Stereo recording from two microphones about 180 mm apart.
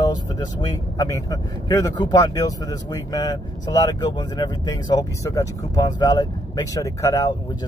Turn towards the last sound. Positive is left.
turn(degrees=20)  # may be behind; listen again after turning